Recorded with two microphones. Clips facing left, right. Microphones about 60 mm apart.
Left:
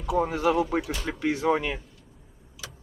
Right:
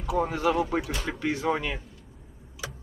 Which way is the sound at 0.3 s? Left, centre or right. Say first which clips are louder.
Left 1 dB; centre.